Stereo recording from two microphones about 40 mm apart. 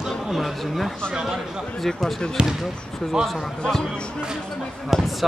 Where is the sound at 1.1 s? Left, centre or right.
Centre.